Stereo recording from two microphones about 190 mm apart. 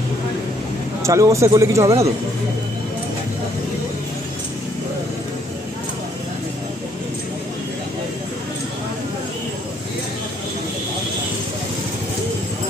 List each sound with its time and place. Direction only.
1.0 s speech: 15° right (ahead or behind)